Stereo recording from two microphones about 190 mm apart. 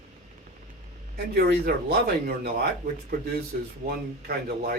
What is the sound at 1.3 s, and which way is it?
Speech, 55° right (ahead or behind).